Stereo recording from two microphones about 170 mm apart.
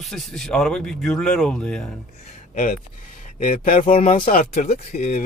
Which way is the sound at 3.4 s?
50° left (ahead or behind).